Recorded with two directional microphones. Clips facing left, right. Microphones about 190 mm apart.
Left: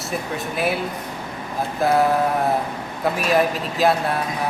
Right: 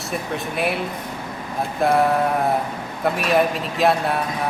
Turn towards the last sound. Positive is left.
turn(degrees=0)  # may be behind; listen again after turning